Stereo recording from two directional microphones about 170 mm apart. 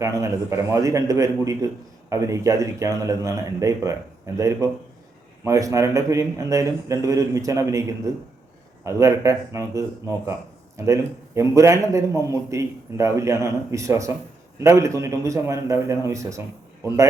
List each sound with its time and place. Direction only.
0.0 s a man's voice: 15° right (ahead or behind)